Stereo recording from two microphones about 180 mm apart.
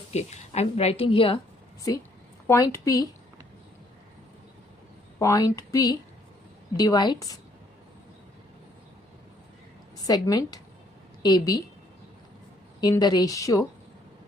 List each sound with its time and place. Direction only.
0.1 s a woman's voice: 35° left (ahead or behind)
2.5 s a woman's voice: 15° left (ahead or behind)
5.2 s speech: 15° left (ahead or behind)
10.0 s speech: 20° left (ahead or behind)
12.8 s speech: 20° left (ahead or behind)